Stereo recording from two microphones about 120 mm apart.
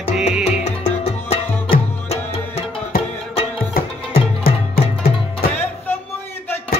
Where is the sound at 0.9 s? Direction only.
65° left (ahead or behind).